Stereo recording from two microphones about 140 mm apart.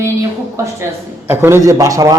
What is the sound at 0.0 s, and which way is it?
A man's voice, 20° right (ahead or behind).